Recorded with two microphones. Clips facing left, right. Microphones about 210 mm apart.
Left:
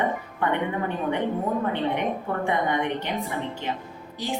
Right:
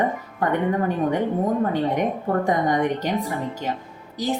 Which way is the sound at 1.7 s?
40° right (ahead or behind).